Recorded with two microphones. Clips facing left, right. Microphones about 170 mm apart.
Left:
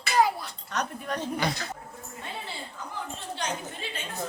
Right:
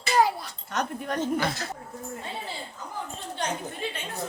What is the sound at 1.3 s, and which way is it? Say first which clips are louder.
Speech: right 2 dB; centre (ahead or behind).